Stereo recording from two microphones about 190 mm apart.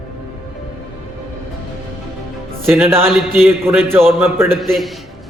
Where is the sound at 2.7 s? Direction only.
10° right (ahead or behind).